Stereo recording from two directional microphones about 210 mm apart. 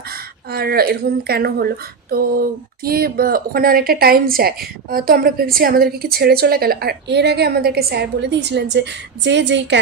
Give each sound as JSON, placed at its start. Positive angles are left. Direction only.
{"t": 0.1, "sound": "speech", "side_deg": -45}